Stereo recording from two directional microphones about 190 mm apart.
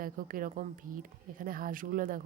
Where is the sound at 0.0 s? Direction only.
45° right (ahead or behind).